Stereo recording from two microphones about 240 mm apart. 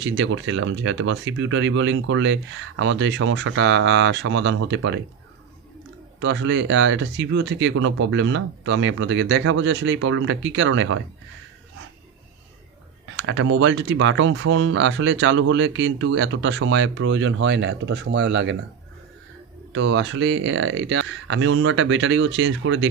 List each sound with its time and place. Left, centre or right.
0.0 s speech: right
6.1 s speech: right
13.1 s speech: right
19.7 s speech: right